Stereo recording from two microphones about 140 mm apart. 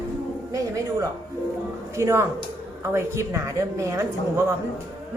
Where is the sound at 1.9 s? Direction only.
20° right (ahead or behind).